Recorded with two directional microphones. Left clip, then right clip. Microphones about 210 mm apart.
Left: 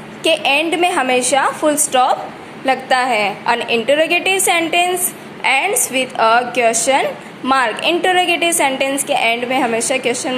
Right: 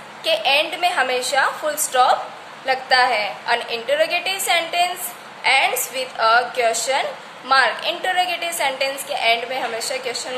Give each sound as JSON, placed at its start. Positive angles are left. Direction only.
{"t": 0.2, "sound": "a woman's voice", "side_deg": 25}